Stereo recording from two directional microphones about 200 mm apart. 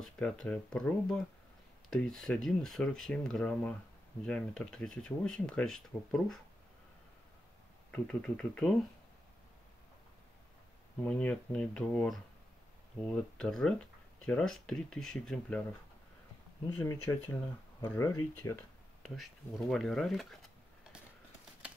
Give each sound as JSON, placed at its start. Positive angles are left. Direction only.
{"t": 0.0, "sound": "speech", "side_deg": 5}
{"t": 7.9, "sound": "speech", "side_deg": 5}
{"t": 11.0, "sound": "speech", "side_deg": 5}
{"t": 16.6, "sound": "speech", "side_deg": 15}
{"t": 19.0, "sound": "speech", "side_deg": 0}